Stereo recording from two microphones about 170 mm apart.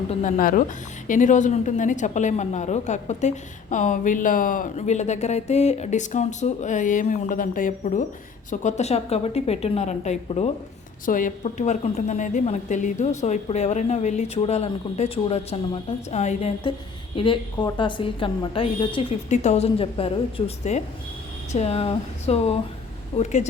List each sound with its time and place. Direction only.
0.1 s a woman's voice: 45° left (ahead or behind)
11.0 s a woman's voice: 50° left (ahead or behind)
17.2 s a woman's voice: 30° left (ahead or behind)